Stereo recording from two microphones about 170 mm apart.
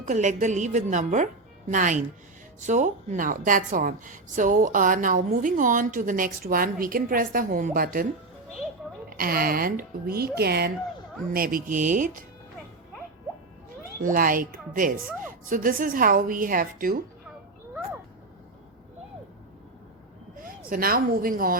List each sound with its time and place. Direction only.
0.0 s a woman's voice: 45° right (ahead or behind)
9.0 s a woman's voice: 60° right (ahead or behind)
11.3 s a woman's voice: 55° right (ahead or behind)
14.0 s a woman's voice: 55° right (ahead or behind)
20.4 s speech: 55° right (ahead or behind)